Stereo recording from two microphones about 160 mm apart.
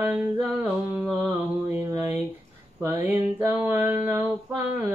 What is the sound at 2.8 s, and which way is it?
Music, 15° right (ahead or behind).